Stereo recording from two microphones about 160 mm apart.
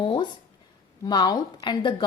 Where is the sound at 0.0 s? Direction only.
30° left (ahead or behind).